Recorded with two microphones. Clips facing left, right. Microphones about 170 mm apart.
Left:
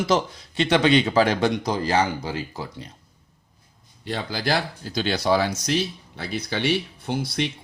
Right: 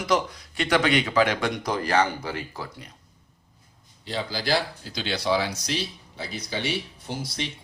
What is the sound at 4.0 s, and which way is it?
Speech, 55° left (ahead or behind).